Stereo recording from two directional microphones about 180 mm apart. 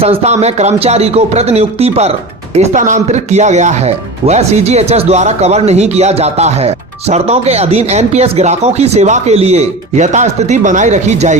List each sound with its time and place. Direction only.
0.0 s speech: 35° right (ahead or behind)